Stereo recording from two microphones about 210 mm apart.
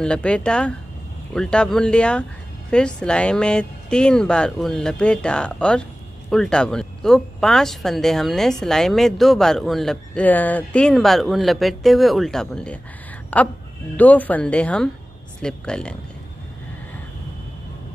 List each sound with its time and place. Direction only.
0.0 s speech: 5° left (ahead or behind)